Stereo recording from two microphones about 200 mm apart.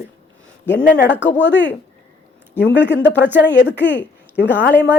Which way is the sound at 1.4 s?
60° left (ahead or behind).